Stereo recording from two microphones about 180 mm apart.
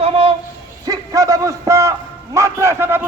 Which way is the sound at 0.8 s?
20° right (ahead or behind).